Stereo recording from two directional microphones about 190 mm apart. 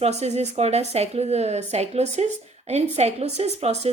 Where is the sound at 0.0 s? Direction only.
35° right (ahead or behind).